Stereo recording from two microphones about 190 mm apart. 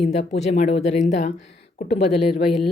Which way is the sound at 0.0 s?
35° left (ahead or behind).